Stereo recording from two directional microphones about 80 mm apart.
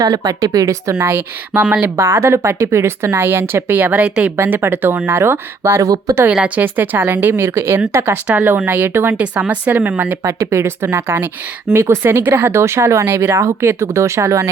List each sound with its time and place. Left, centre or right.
0.0 s speech: right
1.0 s a woman's voice: right
4.4 s a woman's voice: right
5.8 s speech: right
6.3 s a woman's voice: centre
9.2 s a woman's voice: centre
10.2 s speech: right